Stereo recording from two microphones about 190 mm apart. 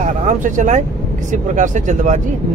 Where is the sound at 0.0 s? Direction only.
40° right (ahead or behind).